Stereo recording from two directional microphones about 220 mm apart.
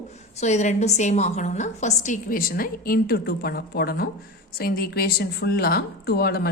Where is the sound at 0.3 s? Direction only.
30° left (ahead or behind).